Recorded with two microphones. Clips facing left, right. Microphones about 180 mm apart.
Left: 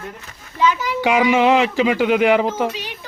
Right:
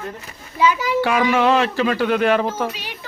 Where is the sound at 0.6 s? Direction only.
10° right (ahead or behind).